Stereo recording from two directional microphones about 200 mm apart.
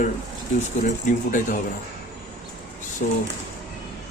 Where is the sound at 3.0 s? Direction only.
40° left (ahead or behind).